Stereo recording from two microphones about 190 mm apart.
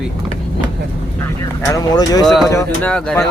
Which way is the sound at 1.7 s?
20° left (ahead or behind).